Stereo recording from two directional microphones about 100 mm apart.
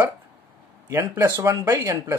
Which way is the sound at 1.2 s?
40° right (ahead or behind).